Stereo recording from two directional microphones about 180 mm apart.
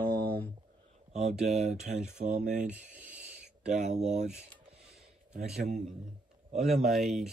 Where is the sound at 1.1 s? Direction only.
40° right (ahead or behind).